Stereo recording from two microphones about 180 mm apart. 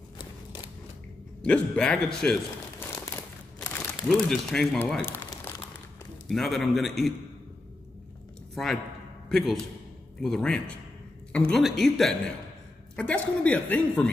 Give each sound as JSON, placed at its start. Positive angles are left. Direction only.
{"t": 0.2, "sound": "a sound", "side_deg": 25}
{"t": 1.4, "sound": "a man's voice", "side_deg": 5}
{"t": 3.5, "sound": "speech", "side_deg": 5}
{"t": 5.0, "sound": "crumpling", "side_deg": 15}
{"t": 6.2, "sound": "a man's voice", "side_deg": 0}
{"t": 9.3, "sound": "a man's voice", "side_deg": 0}